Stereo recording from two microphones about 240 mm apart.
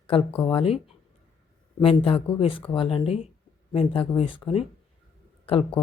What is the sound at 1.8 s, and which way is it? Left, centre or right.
Speech, left.